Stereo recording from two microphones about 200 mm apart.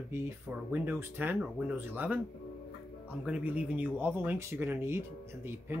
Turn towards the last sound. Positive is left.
turn(degrees=-10)  # may be behind; listen again after turning